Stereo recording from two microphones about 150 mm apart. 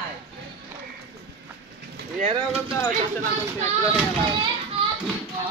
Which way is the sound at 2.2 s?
40° right (ahead or behind).